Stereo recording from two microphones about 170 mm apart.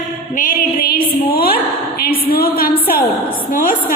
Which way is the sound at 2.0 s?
60° left (ahead or behind).